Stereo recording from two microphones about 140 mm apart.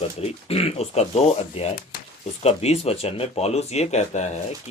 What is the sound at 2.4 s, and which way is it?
Speech, 45° left (ahead or behind).